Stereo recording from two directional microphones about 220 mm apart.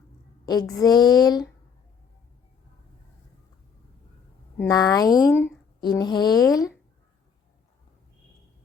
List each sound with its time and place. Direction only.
0.4 s a woman's voice: 15° left (ahead or behind)
4.5 s speech: 15° left (ahead or behind)